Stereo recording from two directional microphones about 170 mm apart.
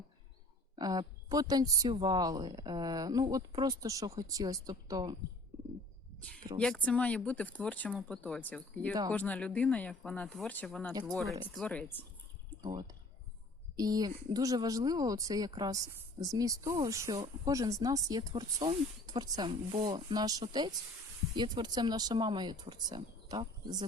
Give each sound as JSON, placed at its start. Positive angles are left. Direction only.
{"t": 0.8, "sound": "speech", "side_deg": -20}
{"t": 6.1, "sound": "a sound", "side_deg": 5}
{"t": 6.6, "sound": "speech", "side_deg": 5}
{"t": 7.9, "sound": "speech", "side_deg": -5}
{"t": 8.2, "sound": "speech", "side_deg": 10}
{"t": 13.7, "sound": "speech", "side_deg": -20}